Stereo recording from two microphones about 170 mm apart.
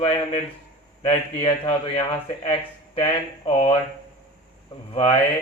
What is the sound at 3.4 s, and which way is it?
Speech, 35° left (ahead or behind).